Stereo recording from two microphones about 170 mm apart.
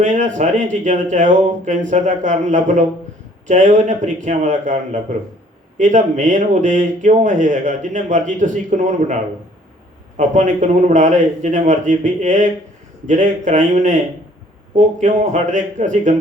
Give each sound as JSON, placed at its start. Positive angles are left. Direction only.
{"t": 0.0, "sound": "speech", "side_deg": -45}
{"t": 10.2, "sound": "speech", "side_deg": -45}